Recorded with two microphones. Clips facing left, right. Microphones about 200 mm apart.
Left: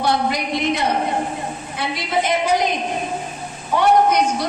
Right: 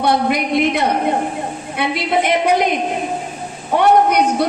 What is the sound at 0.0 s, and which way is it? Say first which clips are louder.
A woman's voice: right 4 dB; 55° right (ahead or behind).